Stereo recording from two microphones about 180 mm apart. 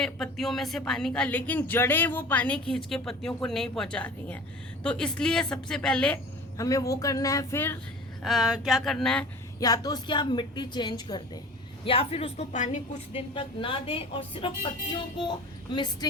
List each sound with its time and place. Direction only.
0.0 s a woman's voice: centre (ahead or behind)
6.6 s a woman's voice: 20° left (ahead or behind)
8.2 s a woman's voice: centre (ahead or behind)
9.6 s a woman's voice: 20° left (ahead or behind)